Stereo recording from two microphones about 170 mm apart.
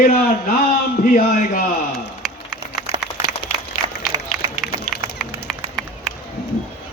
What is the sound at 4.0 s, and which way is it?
Run, centre (ahead or behind).